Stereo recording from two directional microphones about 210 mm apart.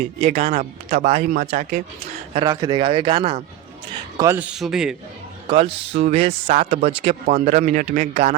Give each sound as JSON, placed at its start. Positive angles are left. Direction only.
{"t": 0.2, "sound": "speech", "side_deg": -30}
{"t": 2.4, "sound": "speech", "side_deg": -20}
{"t": 4.2, "sound": "a man's voice", "side_deg": -10}
{"t": 5.5, "sound": "speech", "side_deg": -25}